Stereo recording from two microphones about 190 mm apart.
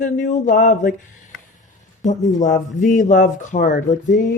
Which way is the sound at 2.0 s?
40° left (ahead or behind).